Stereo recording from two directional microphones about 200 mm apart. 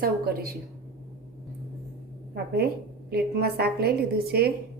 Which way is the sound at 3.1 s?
50° right (ahead or behind).